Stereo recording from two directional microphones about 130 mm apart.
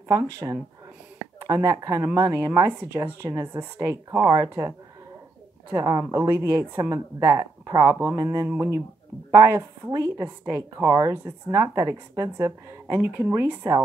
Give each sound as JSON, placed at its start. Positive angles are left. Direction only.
{"t": 0.1, "sound": "a woman's voice", "side_deg": -25}
{"t": 5.8, "sound": "a woman's voice", "side_deg": -25}